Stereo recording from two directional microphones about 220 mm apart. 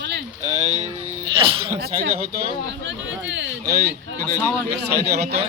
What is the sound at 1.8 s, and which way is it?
Speech, 45° right (ahead or behind).